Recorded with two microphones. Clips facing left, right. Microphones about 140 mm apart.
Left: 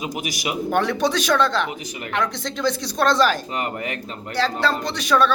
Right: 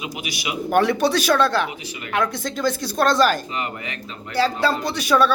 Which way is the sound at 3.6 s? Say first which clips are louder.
Left 3 dB; 50° left (ahead or behind).